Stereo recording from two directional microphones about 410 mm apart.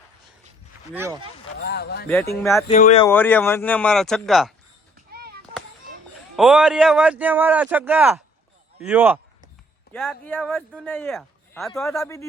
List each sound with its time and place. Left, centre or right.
0.9 s speech: centre
1.5 s speech: left
2.4 s speech: centre
5.1 s a sound: right
6.3 s speech: centre
8.8 s a sound: centre
9.9 s speech: centre